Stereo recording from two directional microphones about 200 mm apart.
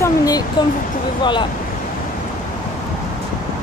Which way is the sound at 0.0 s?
15° left (ahead or behind).